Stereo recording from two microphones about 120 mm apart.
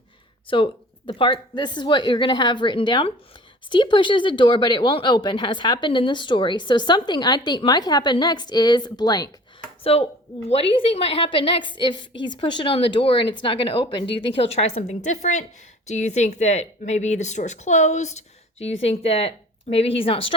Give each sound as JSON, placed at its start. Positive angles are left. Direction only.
{"t": 0.4, "sound": "speech", "side_deg": 45}
{"t": 9.8, "sound": "a woman's voice", "side_deg": 55}
{"t": 15.9, "sound": "a woman's voice", "side_deg": 75}